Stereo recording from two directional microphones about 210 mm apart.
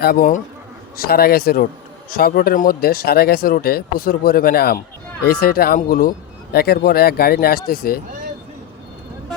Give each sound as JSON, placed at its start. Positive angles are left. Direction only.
{"t": 0.0, "sound": "a man's voice", "side_deg": 45}